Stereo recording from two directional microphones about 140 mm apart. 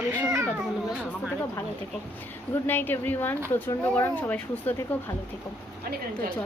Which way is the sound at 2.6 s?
15° left (ahead or behind).